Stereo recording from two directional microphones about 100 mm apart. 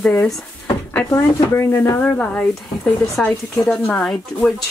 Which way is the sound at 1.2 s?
25° left (ahead or behind).